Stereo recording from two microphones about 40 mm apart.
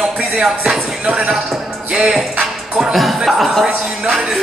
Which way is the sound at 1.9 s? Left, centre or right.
Right.